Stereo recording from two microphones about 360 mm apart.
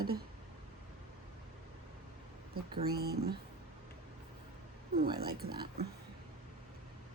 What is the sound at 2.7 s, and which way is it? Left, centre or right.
Speech, right.